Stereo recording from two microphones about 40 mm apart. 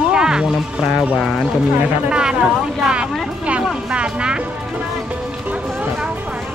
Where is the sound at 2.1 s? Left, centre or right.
Right.